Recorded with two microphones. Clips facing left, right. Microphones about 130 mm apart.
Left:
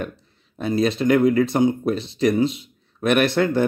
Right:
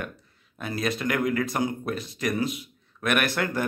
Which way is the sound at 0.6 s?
25° left (ahead or behind).